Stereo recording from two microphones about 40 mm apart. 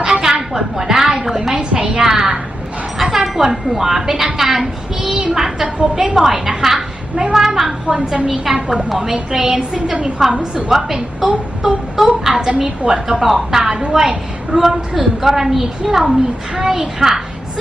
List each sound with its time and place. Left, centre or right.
0.0 s a sound: centre
3.2 s a woman's voice: centre
4.4 s child singing: centre
5.1 s a sound: centre
6.1 s a woman's voice: centre
7.9 s a woman's voice: right
10.7 s a woman's voice: centre